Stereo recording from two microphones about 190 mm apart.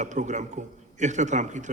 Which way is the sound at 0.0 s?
40° right (ahead or behind).